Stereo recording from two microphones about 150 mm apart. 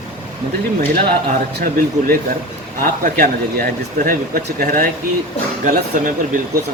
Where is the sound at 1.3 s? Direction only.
70° right (ahead or behind).